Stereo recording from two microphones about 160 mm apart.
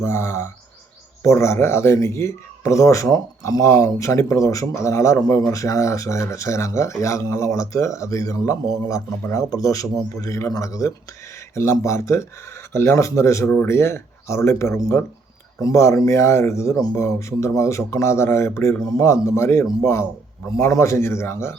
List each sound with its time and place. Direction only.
0.0 s speech: 15° left (ahead or behind)